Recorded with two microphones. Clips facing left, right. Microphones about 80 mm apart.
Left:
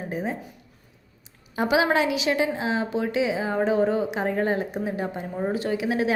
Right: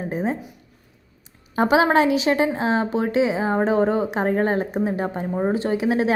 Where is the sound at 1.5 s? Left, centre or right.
Right.